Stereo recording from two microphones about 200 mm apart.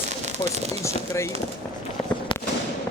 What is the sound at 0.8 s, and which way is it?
Speech, 15° left (ahead or behind).